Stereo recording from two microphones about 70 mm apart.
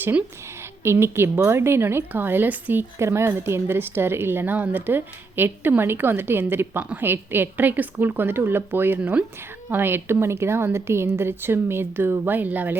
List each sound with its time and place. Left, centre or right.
0.0 s speech: right
0.9 s speech: right
3.0 s speech: right
9.0 s speech: right
9.6 s speech: right